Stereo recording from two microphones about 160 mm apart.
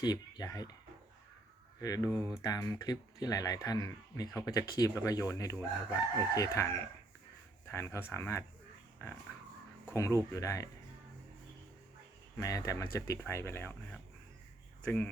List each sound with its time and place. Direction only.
0.0 s speech: 25° left (ahead or behind)
1.8 s speech: 20° left (ahead or behind)
12.4 s speech: 20° left (ahead or behind)
14.8 s speech: 10° left (ahead or behind)